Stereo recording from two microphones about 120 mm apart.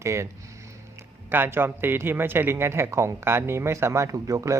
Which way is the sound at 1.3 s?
15° right (ahead or behind).